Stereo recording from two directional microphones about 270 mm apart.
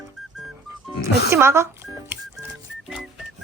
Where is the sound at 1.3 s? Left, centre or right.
Centre.